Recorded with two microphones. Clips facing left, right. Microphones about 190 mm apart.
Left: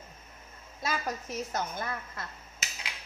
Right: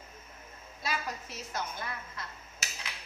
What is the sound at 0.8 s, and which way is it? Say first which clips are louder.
A woman's voice: left 3 dB; 45° left (ahead or behind).